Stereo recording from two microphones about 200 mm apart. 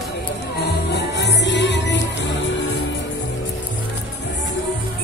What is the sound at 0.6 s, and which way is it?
Music, 55° left (ahead or behind).